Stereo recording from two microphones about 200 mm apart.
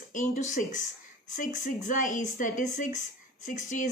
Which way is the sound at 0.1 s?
40° left (ahead or behind).